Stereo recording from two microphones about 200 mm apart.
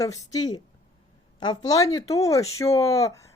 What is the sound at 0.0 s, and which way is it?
A woman's voice, 15° left (ahead or behind).